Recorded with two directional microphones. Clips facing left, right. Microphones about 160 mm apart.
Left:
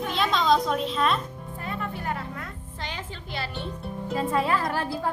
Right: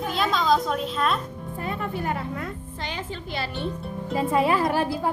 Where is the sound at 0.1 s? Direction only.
Centre (ahead or behind).